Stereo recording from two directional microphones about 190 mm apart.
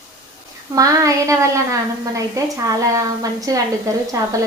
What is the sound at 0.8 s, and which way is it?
A woman's voice, 15° right (ahead or behind).